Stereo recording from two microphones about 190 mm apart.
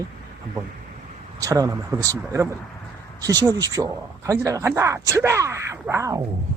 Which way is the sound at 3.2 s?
20° right (ahead or behind).